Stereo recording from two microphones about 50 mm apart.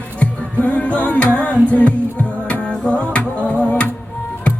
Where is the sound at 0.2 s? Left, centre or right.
Left.